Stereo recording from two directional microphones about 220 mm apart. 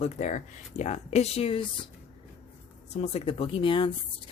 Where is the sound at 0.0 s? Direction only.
30° left (ahead or behind).